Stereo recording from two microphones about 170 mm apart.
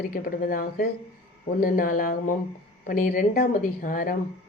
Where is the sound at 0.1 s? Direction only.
55° left (ahead or behind).